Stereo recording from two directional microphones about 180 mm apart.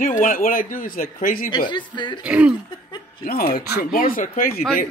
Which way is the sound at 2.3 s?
5° right (ahead or behind).